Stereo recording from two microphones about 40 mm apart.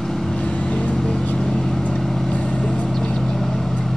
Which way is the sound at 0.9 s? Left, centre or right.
Centre.